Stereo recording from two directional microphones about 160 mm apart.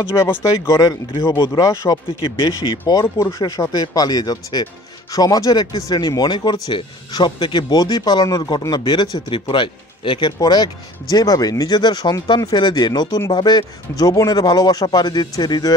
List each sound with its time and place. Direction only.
0.2 s speech: 20° left (ahead or behind)
2.2 s speech: 30° left (ahead or behind)